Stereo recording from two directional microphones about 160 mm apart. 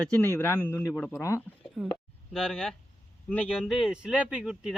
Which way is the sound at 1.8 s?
5° right (ahead or behind).